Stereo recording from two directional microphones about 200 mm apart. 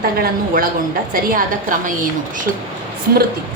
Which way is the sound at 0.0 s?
45° right (ahead or behind).